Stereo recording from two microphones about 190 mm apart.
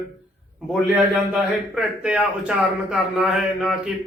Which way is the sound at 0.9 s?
5° right (ahead or behind).